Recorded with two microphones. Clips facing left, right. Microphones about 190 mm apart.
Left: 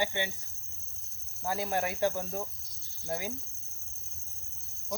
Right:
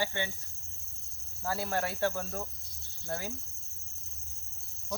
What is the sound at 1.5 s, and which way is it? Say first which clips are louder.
Speech: left 1 dB; 15° left (ahead or behind).